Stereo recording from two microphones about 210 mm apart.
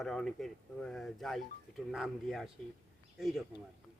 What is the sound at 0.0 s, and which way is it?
Speech, centre (ahead or behind).